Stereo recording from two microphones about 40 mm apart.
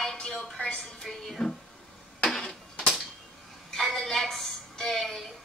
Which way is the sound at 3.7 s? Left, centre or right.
Centre.